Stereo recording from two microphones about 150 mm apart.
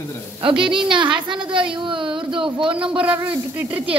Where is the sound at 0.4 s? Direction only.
35° right (ahead or behind).